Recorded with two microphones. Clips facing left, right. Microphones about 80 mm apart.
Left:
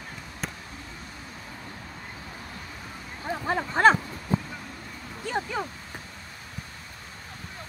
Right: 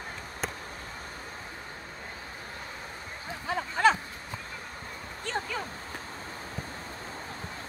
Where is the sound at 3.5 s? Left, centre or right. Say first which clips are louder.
Left 4 dB; left.